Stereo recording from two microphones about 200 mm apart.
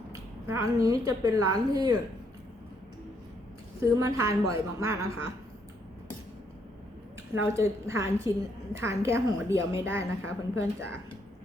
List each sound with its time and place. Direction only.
0.1 s a woman's voice: 15° right (ahead or behind)
4.0 s a woman's voice: 15° right (ahead or behind)
7.3 s a woman's voice: 15° right (ahead or behind)